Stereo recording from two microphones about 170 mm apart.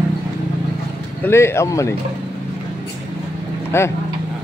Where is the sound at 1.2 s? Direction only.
15° left (ahead or behind).